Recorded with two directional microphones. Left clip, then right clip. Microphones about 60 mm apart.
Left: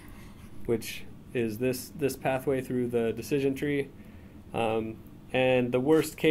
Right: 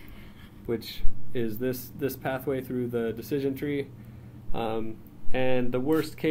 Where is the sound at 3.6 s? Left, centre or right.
Centre; by 6.2 s left.